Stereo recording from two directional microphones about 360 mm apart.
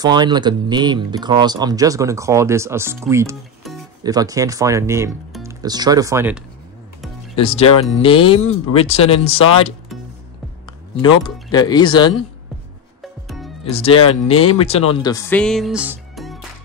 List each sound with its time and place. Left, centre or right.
0.0 s speech: centre
7.3 s speech: centre
11.5 s speech: centre
13.7 s speech: centre